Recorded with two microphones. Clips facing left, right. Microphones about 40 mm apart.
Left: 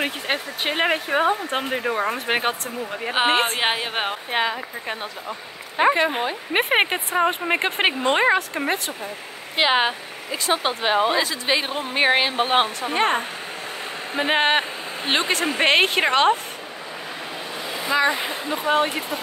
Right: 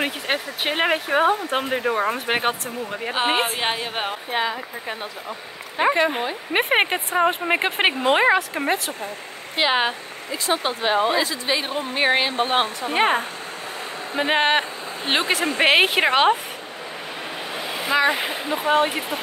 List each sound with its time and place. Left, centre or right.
0.0 s speech: centre
3.5 s a woman's voice: left
4.3 s speech: left
5.9 s speech: centre
9.6 s speech: left
12.9 s a woman's voice: centre
14.1 s a woman's voice: centre
17.6 s speech: right